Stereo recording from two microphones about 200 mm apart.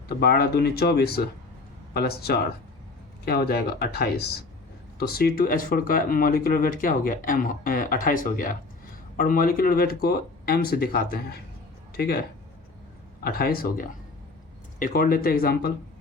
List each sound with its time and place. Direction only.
0.2 s speech: 50° left (ahead or behind)
13.2 s speech: 50° left (ahead or behind)